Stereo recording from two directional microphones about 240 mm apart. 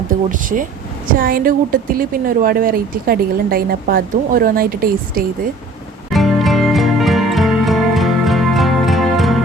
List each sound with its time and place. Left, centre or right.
0.1 s a woman's voice: right
6.1 s music: centre